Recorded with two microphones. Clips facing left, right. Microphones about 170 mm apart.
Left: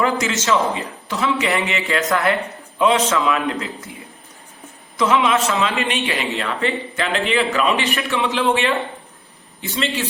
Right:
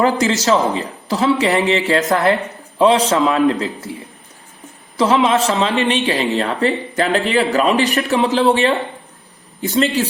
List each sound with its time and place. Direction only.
0.0 s a man's voice: 35° right (ahead or behind)
4.9 s a man's voice: 35° right (ahead or behind)